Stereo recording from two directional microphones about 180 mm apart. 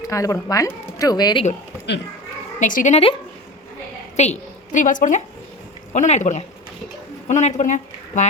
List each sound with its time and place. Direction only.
0.1 s speech: 15° left (ahead or behind)
2.6 s speech: 45° left (ahead or behind)
4.2 s a woman's voice: 40° left (ahead or behind)